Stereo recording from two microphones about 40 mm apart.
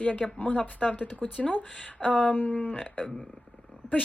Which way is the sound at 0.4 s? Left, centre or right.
Left.